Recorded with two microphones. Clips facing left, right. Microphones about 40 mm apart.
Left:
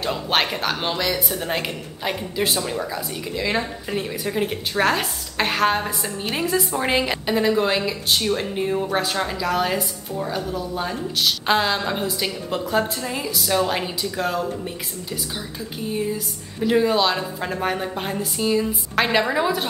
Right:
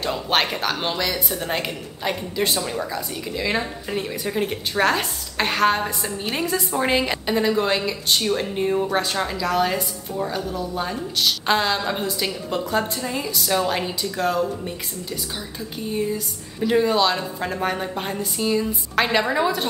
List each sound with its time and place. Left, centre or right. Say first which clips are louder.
0.0 s speech: even; centre
15.9 s speech: right 1 dB; centre